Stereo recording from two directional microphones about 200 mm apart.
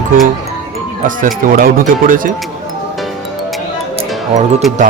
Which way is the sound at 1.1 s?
45° right (ahead or behind).